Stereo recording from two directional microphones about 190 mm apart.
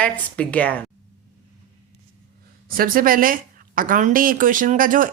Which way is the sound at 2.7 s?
50° right (ahead or behind).